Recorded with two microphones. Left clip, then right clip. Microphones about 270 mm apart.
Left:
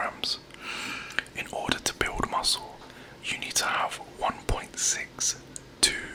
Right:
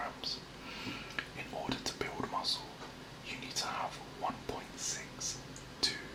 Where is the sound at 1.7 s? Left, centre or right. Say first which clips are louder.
Left 12 dB; left.